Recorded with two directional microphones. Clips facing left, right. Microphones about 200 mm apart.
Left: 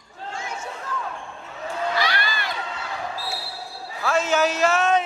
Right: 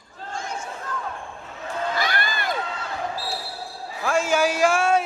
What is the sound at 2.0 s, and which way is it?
Crowd, 50° right (ahead or behind).